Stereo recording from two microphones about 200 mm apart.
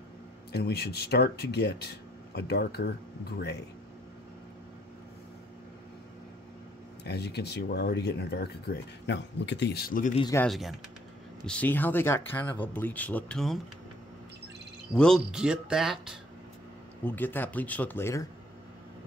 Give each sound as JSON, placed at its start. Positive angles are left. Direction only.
{"t": 0.5, "sound": "speech", "side_deg": 55}
{"t": 7.1, "sound": "speech", "side_deg": 55}
{"t": 10.3, "sound": "speech", "side_deg": 5}
{"t": 15.0, "sound": "speech", "side_deg": 0}
{"t": 17.0, "sound": "speech", "side_deg": 10}